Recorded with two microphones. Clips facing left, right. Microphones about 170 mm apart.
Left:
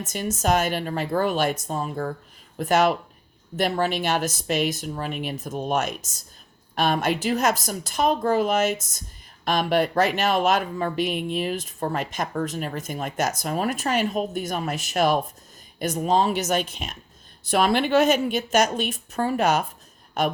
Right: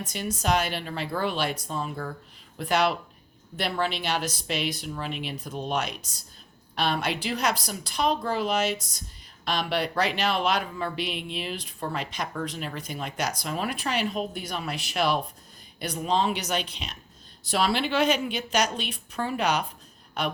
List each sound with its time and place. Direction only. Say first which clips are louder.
0.1 s a woman's voice: left 4 dB; 45° left (ahead or behind)